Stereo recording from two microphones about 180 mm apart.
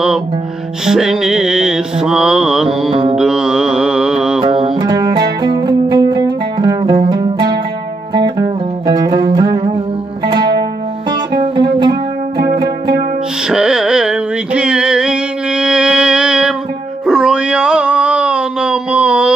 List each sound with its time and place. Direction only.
0.8 s mantra: 5° right (ahead or behind)
2.9 s music: 35° right (ahead or behind)
3.2 s mantra: 5° right (ahead or behind)
4.4 s music: 30° right (ahead or behind)
11.1 s music: 25° right (ahead or behind)
12.6 s music: 60° right (ahead or behind)
13.5 s music: 5° right (ahead or behind)